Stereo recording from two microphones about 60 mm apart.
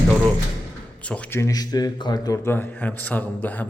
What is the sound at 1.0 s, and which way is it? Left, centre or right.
Speech, left.